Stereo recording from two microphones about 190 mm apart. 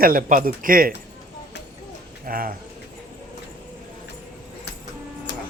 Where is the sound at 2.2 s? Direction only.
50° right (ahead or behind).